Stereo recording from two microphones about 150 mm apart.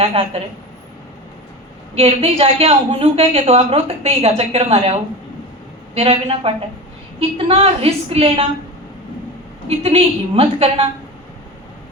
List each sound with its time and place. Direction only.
0.0 s a woman's voice: 40° right (ahead or behind)
2.0 s a woman's voice: 40° right (ahead or behind)
9.6 s a woman's voice: 40° right (ahead or behind)